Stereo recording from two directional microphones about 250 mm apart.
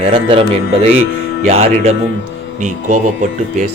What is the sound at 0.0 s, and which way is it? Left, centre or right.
Speech, right.